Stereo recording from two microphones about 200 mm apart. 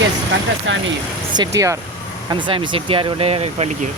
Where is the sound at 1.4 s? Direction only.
15° right (ahead or behind).